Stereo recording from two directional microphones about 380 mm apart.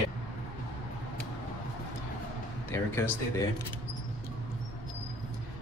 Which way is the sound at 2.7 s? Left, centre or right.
Centre.